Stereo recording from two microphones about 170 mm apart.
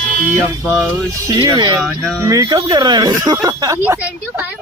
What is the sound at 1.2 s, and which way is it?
Speech, 25° right (ahead or behind).